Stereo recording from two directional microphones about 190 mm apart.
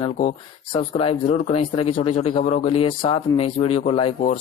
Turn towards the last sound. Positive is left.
turn(degrees=30)  # may be behind; listen again after turning